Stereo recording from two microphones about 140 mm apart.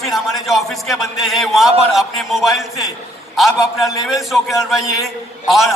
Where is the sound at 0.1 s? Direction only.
Centre (ahead or behind).